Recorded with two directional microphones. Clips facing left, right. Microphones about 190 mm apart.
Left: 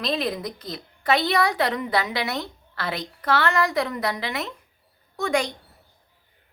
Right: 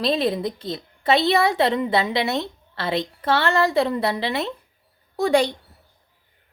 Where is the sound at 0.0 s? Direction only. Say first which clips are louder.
Right 5 dB; 25° right (ahead or behind).